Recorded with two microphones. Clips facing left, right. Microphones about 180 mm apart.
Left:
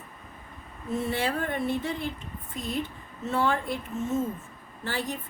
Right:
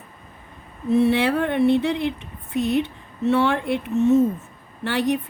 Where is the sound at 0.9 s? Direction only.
70° right (ahead or behind).